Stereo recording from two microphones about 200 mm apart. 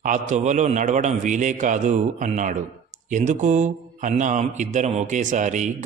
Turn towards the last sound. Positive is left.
turn(degrees=-35)  # may be behind; listen again after turning